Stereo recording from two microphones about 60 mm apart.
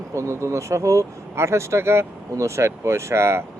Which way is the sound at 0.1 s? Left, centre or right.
Right.